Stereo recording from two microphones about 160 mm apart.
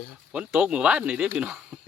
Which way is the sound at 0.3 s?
5° right (ahead or behind).